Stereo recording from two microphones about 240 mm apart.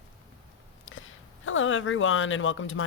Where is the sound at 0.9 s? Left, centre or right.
Left.